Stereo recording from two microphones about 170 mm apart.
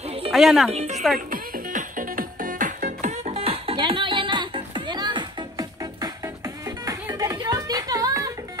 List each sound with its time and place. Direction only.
0.0 s music: 35° right (ahead or behind)
0.3 s speech: centre (ahead or behind)
0.7 s a woman's voice: 40° right (ahead or behind)
1.3 s music: 55° right (ahead or behind); by 8.3 s 20° right (ahead or behind)